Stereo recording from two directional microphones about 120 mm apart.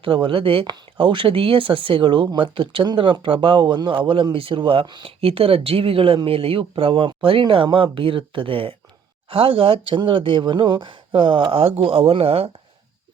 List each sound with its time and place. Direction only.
0.0 s speech: 45° right (ahead or behind)